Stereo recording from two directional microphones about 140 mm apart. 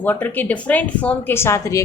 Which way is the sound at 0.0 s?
15° left (ahead or behind).